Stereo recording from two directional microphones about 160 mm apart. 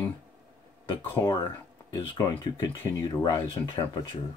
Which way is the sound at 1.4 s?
25° left (ahead or behind).